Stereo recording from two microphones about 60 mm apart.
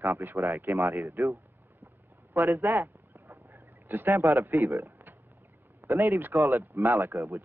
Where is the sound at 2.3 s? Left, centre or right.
Right.